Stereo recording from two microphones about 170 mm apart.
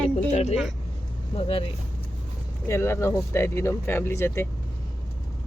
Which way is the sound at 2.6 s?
15° left (ahead or behind).